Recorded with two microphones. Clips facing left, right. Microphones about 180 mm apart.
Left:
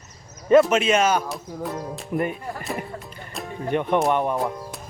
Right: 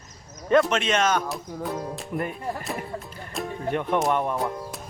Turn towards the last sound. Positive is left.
turn(degrees=0)  # may be behind; listen again after turning